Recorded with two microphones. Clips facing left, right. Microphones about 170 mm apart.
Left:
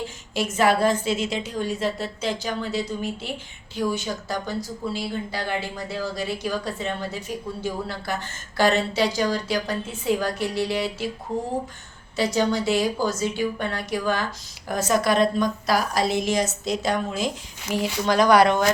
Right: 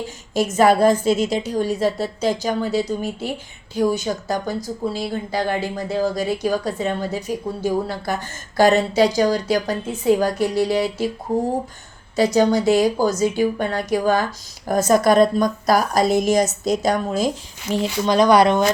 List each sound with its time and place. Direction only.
0.3 s a woman's voice: 40° right (ahead or behind)
12.1 s a woman's voice: 45° right (ahead or behind)
17.7 s speech: 25° right (ahead or behind)